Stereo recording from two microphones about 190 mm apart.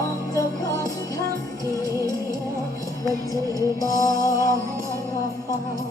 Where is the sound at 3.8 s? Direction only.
20° left (ahead or behind).